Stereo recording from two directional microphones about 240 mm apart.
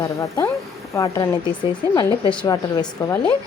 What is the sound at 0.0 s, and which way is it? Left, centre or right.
Speech, centre.